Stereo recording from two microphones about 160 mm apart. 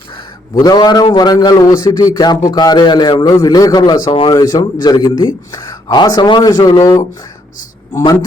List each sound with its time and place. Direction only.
0.6 s a man's voice: 25° left (ahead or behind)